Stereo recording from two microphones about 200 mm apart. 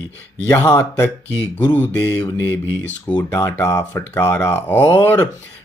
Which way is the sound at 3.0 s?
10° left (ahead or behind).